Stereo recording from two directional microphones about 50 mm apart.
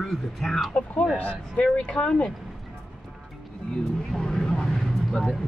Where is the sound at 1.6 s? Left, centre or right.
Left.